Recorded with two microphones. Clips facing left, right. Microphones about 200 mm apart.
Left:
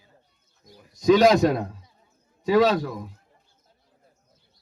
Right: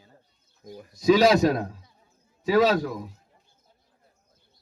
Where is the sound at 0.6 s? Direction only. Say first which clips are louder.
Right 10 dB; 50° right (ahead or behind).